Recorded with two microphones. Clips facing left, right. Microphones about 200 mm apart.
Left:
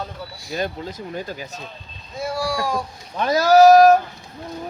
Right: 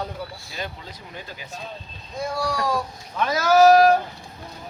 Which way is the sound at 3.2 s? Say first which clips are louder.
Left 3 dB; 35° left (ahead or behind).